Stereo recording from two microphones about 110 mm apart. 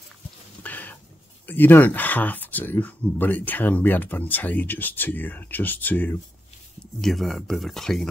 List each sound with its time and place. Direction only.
0.6 s a sound: 15° left (ahead or behind)
1.5 s speech: 20° left (ahead or behind)
7.0 s speech: centre (ahead or behind)